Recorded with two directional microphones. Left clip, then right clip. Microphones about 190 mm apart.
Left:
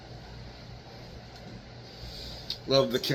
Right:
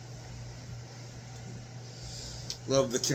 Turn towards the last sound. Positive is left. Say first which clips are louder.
# left 3 dB
turn(degrees=-20)  # may be behind; listen again after turning